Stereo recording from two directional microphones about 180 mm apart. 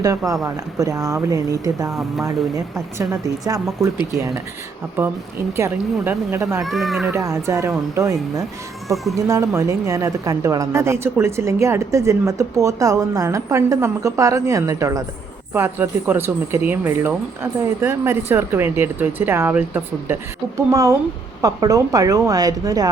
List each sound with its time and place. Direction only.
0.4 s a woman's voice: 20° right (ahead or behind)
3.8 s speech: centre (ahead or behind)
5.5 s a woman's voice: 15° right (ahead or behind)
6.6 s speech: centre (ahead or behind)
7.1 s a woman's voice: 15° right (ahead or behind)